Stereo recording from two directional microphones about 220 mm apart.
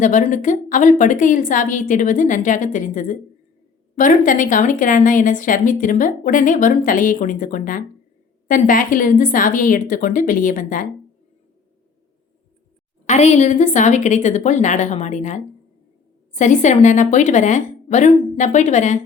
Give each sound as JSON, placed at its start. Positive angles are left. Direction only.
{"t": 0.0, "sound": "a woman's voice", "side_deg": 35}
{"t": 13.1, "sound": "a woman's voice", "side_deg": 30}